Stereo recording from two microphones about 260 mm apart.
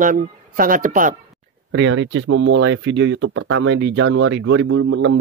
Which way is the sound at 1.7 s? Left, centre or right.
Right.